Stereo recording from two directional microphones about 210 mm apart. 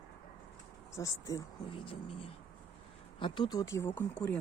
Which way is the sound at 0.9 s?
15° left (ahead or behind).